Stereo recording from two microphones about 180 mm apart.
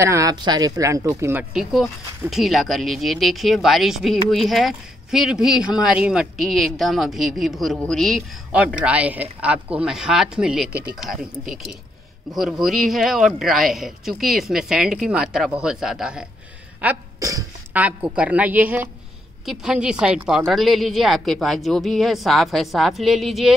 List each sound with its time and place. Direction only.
0.0 s speech: 15° right (ahead or behind)
1.5 s speech: centre (ahead or behind)
16.8 s speech: 15° right (ahead or behind)
17.8 s a woman's voice: 5° right (ahead or behind)